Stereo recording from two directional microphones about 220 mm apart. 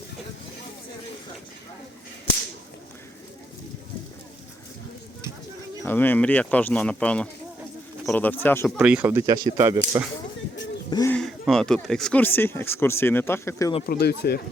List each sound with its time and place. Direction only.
5.8 s speech: 10° left (ahead or behind); by 10.1 s 15° right (ahead or behind)
10.8 s speech: 20° left (ahead or behind)
11.1 s speech: centre (ahead or behind)
13.8 s speech: 45° left (ahead or behind)